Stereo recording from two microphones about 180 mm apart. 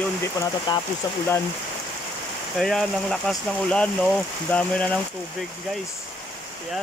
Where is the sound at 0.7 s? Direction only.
25° left (ahead or behind).